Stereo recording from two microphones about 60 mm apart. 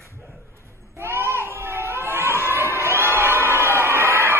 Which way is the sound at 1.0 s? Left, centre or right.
Right.